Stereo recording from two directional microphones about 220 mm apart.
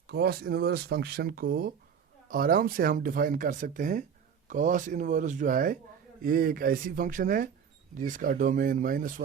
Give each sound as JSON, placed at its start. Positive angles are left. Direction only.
{"t": 0.1, "sound": "speech", "side_deg": -45}